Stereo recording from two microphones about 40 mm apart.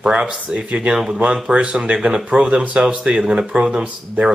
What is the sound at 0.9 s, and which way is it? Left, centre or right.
Speech, centre.